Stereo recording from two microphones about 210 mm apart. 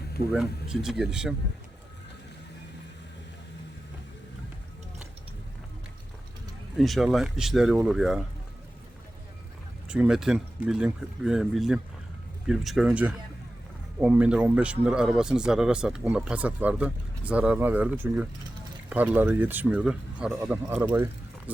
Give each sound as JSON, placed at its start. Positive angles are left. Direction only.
{"t": 0.3, "sound": "a man's voice", "side_deg": -5}
{"t": 6.7, "sound": "a man's voice", "side_deg": 0}
{"t": 9.9, "sound": "a man's voice", "side_deg": -5}